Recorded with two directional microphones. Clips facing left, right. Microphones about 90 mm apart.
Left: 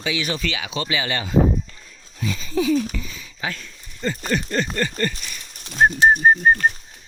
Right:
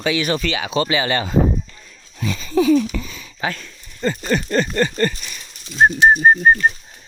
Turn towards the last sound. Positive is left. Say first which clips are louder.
# right 2 dB
turn(degrees=-55)  # may be behind; listen again after turning